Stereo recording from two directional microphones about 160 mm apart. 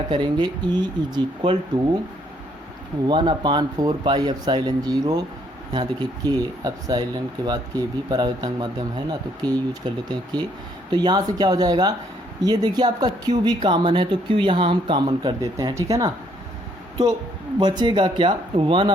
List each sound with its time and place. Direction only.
0.1 s speech: 30° right (ahead or behind)
3.1 s speech: 30° right (ahead or behind)
17.6 s speech: 25° right (ahead or behind)